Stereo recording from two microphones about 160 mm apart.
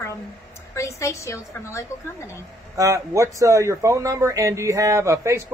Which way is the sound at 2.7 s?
20° right (ahead or behind).